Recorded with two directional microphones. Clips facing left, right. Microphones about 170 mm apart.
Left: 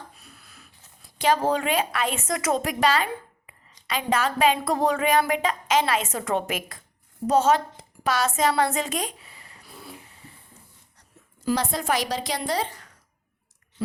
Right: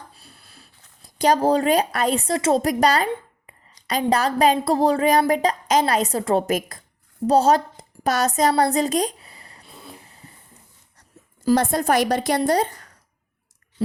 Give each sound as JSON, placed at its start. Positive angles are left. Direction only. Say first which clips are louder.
{"t": 0.1, "sound": "speech", "louder": "right 1 dB", "side_deg": -30}
{"t": 7.3, "sound": "a sound", "louder": "right 3 dB", "side_deg": -35}
{"t": 11.4, "sound": "a woman's voice", "louder": "right 6 dB", "side_deg": -50}